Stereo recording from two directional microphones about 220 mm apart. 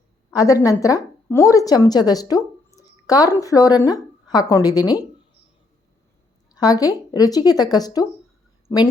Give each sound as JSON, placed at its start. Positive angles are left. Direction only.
{"t": 0.3, "sound": "a woman's voice", "side_deg": 15}
{"t": 2.3, "sound": "a sound", "side_deg": 15}
{"t": 3.8, "sound": "a woman's voice", "side_deg": 15}
{"t": 6.5, "sound": "a woman's voice", "side_deg": 15}